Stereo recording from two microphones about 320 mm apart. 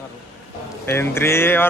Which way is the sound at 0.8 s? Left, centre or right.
Centre.